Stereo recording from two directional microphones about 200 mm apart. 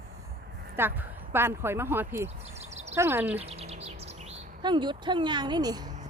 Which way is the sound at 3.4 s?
30° right (ahead or behind).